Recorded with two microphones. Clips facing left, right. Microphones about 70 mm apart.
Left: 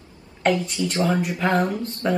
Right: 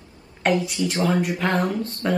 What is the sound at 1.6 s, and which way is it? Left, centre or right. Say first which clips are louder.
Speech: left 1 dB; left.